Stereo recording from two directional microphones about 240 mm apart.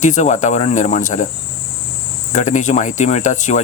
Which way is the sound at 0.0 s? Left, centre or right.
Left.